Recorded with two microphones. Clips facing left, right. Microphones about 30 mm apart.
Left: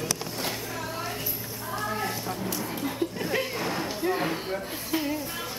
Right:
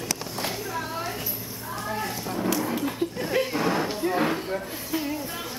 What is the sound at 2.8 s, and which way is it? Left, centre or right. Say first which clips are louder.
Chuckle: right 2 dB; centre.